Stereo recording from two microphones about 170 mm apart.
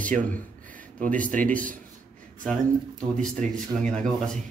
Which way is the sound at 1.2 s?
50° right (ahead or behind).